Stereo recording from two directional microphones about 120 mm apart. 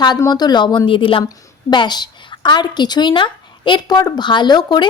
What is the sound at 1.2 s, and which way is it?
A woman's voice, 35° left (ahead or behind).